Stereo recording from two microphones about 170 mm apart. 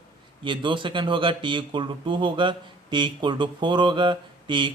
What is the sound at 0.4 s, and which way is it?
A man's voice, 30° right (ahead or behind).